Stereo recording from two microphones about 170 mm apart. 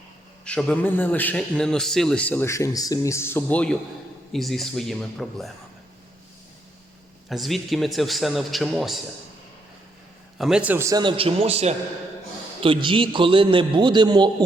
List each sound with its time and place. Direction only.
0.4 s a man's voice: 5° left (ahead or behind)
7.3 s a man's voice: centre (ahead or behind)
10.3 s a man's voice: 5° right (ahead or behind); by 14.3 s 25° right (ahead or behind)